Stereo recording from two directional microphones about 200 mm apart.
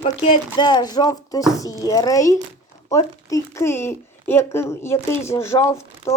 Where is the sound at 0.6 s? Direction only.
20° left (ahead or behind).